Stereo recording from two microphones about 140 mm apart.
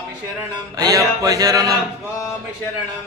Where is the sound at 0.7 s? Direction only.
25° right (ahead or behind).